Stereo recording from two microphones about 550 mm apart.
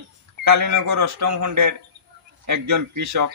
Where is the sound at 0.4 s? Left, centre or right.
Right.